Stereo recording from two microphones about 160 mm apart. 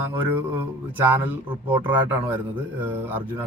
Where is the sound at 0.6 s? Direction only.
10° right (ahead or behind).